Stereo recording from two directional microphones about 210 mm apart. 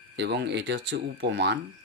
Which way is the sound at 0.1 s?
55° right (ahead or behind).